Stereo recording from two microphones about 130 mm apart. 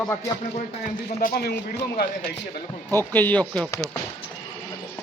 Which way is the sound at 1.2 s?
90° left.